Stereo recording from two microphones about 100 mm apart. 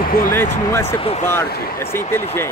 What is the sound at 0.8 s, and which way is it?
Speech, 70° left (ahead or behind).